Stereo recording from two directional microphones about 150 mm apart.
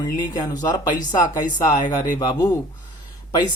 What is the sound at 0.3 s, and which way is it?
Speech, 25° left (ahead or behind).